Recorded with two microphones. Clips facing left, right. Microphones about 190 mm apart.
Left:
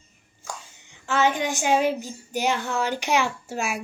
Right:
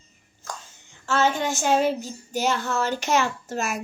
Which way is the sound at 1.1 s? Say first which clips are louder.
Even; 15° left (ahead or behind).